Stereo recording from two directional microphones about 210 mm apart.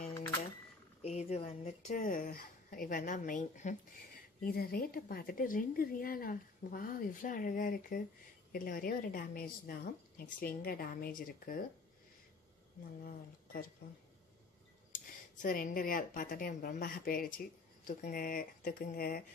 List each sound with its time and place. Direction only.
1.0 s a woman's voice: 30° left (ahead or behind)
13.0 s a woman's voice: 45° left (ahead or behind)
15.4 s a woman's voice: 40° left (ahead or behind)